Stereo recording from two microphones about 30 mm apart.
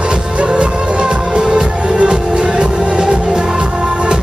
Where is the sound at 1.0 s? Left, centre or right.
Right.